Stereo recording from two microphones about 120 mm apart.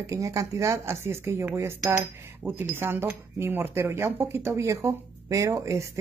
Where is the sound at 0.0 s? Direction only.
25° right (ahead or behind).